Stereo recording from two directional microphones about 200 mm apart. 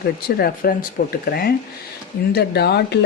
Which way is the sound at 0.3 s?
50° left (ahead or behind).